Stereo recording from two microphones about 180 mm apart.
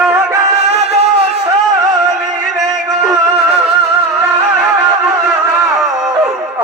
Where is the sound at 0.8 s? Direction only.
35° right (ahead or behind).